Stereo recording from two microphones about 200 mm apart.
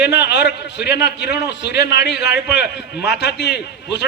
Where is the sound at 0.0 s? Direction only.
55° left (ahead or behind).